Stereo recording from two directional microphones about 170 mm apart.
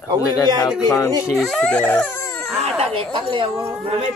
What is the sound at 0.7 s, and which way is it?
Speech, 20° left (ahead or behind).